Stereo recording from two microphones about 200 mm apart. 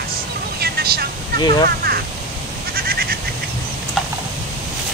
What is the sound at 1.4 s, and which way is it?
Speech, 20° left (ahead or behind).